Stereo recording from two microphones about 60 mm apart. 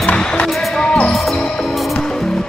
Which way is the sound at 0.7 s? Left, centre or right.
Centre.